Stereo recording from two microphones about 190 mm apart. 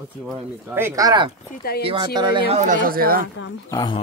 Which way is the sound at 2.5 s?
40° right (ahead or behind).